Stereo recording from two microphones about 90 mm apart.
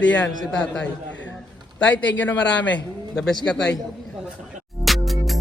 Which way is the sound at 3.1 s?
5° left (ahead or behind).